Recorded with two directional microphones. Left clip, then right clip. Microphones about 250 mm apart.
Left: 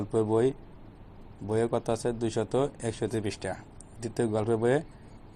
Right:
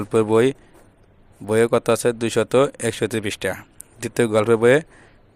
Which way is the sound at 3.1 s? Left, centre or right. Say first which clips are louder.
Right 9 dB; right.